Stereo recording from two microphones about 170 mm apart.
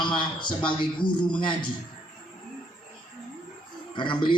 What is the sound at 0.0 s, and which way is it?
A man's voice, 30° left (ahead or behind).